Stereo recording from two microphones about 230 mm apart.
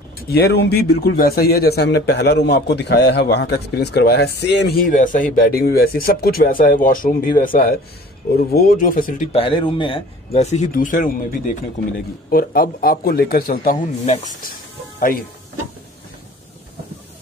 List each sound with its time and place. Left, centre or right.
0.3 s a man's voice: left
9.3 s a man's voice: left